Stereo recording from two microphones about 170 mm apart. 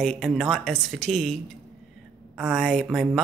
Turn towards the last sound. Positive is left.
turn(degrees=0)  # may be behind; listen again after turning